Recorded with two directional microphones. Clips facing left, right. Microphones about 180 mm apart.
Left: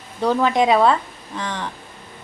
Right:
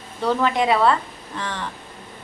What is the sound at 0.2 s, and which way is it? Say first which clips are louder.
A woman's voice: left 3 dB; 15° left (ahead or behind).